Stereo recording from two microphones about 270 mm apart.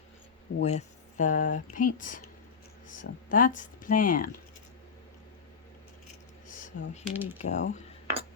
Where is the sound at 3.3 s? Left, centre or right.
Left.